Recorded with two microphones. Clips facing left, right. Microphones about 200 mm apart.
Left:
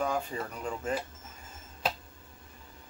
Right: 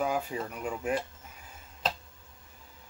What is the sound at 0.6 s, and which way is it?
Speech, 10° right (ahead or behind).